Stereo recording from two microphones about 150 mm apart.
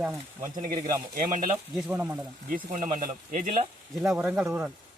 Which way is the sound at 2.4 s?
65° right (ahead or behind).